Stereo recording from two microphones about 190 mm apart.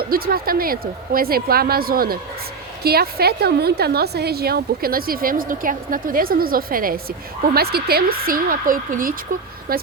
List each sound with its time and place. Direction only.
0.0 s a woman's voice: 50° right (ahead or behind)